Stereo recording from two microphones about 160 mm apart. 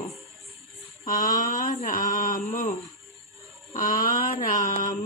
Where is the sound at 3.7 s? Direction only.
55° left (ahead or behind).